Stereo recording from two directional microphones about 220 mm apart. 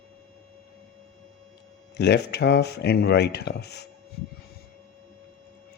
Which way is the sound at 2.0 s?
50° left (ahead or behind).